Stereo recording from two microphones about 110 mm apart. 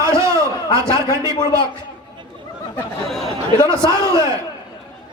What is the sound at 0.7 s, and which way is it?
Speech, 30° right (ahead or behind).